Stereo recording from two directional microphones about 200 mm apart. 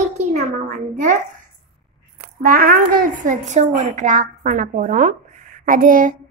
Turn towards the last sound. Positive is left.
turn(degrees=-40)  # may be behind; listen again after turning